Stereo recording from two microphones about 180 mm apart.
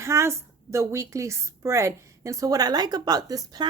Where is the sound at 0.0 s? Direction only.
15° right (ahead or behind).